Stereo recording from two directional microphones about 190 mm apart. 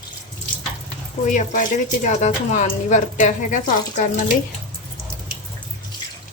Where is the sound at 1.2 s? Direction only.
40° left (ahead or behind).